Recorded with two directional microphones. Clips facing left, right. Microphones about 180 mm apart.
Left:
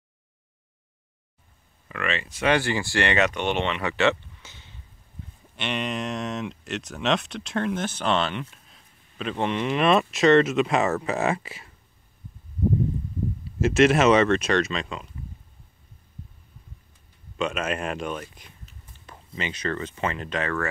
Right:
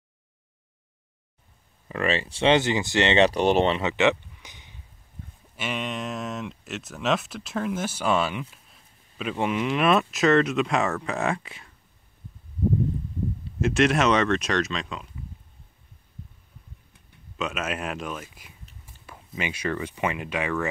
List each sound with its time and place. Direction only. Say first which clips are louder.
1.9 s speech: right 4 dB; 35° right (ahead or behind)
3.8 s a sound: right 1 dB; 20° right (ahead or behind)
5.6 s speech: left 2 dB; centre (ahead or behind)
13.6 s speech: left 3 dB; centre (ahead or behind)
17.4 s speech: left 3 dB; centre (ahead or behind)